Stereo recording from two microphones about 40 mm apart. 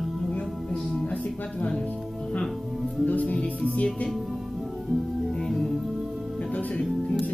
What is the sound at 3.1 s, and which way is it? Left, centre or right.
Music, left.